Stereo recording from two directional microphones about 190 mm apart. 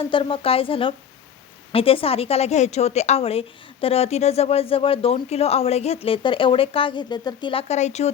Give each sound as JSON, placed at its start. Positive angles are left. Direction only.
{"t": 0.0, "sound": "a woman's voice", "side_deg": 30}